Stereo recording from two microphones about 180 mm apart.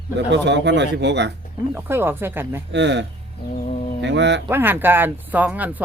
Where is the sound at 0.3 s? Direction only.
75° right (ahead or behind).